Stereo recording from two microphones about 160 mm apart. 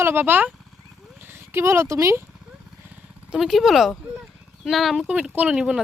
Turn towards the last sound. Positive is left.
turn(degrees=-5)  # may be behind; listen again after turning